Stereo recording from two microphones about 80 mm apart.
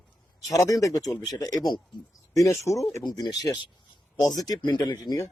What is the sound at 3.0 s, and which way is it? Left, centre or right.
Speech, left.